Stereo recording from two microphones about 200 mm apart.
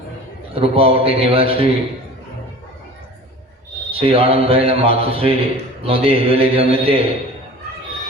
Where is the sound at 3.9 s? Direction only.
30° right (ahead or behind).